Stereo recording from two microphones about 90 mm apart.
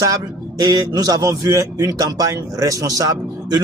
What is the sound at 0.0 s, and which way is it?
A man's voice, 45° right (ahead or behind).